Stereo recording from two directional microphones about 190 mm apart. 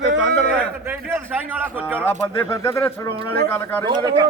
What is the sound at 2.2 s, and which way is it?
Speech, 15° left (ahead or behind).